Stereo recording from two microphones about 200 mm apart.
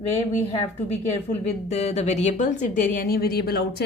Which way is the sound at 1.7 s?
35° left (ahead or behind).